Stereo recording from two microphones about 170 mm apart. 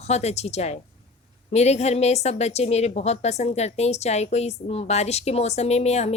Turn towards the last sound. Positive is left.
turn(degrees=40)  # may be behind; listen again after turning